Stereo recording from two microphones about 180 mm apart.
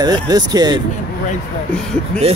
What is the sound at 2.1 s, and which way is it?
Speech, 5° left (ahead or behind).